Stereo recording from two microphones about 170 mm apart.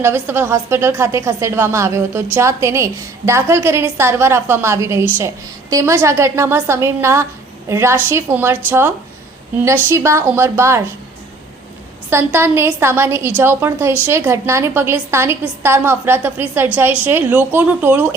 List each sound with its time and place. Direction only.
0.0 s a woman's voice: 15° right (ahead or behind)
12.1 s a woman's voice: 15° right (ahead or behind)